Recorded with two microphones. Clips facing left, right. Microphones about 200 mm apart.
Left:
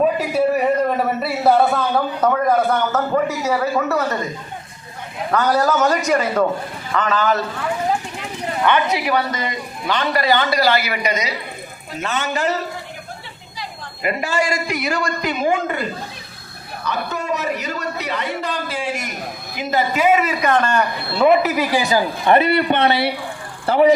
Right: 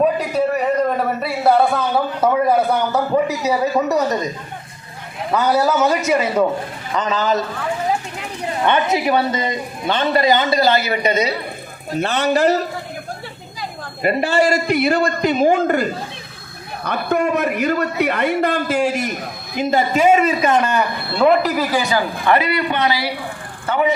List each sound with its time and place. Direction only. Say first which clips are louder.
0.0 s a man's voice: even; 5° left (ahead or behind); by 4.3 s 15° right (ahead or behind)
5.3 s speech: right 1 dB; 10° right (ahead or behind)
8.6 s a man's voice: right 1 dB; 25° right (ahead or behind); by 12.6 s 40° right (ahead or behind)
14.0 s a man's voice: right 4 dB; 35° right (ahead or behind)
14.4 s a man's voice: right 6 dB; 60° right (ahead or behind)
14.8 s a man's voice: right 5 dB; 30° right (ahead or behind)
15.4 s a man's voice: right 4 dB; 40° right (ahead or behind)
16.8 s a man's voice: right 6 dB; 55° right (ahead or behind)
19.7 s a man's voice: right 2 dB; 30° right (ahead or behind)
20.6 s a man's voice: even; 5° right (ahead or behind)
21.8 s a man's voice: left 1 dB; 15° left (ahead or behind)